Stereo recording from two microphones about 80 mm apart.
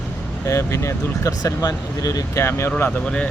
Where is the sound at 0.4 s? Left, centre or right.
Left.